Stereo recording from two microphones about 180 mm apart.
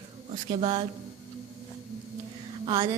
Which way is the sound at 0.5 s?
30° right (ahead or behind).